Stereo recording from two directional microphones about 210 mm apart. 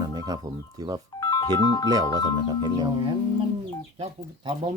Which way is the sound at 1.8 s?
15° right (ahead or behind).